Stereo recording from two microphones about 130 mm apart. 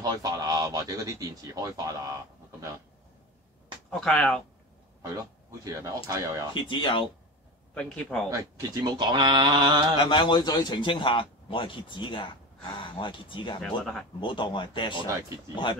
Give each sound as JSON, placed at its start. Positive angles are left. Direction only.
{"t": 0.0, "sound": "speech", "side_deg": -30}
{"t": 3.9, "sound": "speech", "side_deg": 5}
{"t": 5.1, "sound": "speech", "side_deg": -30}
{"t": 6.5, "sound": "a man's voice", "side_deg": 40}
{"t": 7.7, "sound": "speech", "side_deg": 5}
{"t": 8.3, "sound": "speech", "side_deg": -30}
{"t": 10.0, "sound": "a man's voice", "side_deg": 40}
{"t": 13.6, "sound": "speech", "side_deg": 5}
{"t": 14.2, "sound": "a man's voice", "side_deg": 40}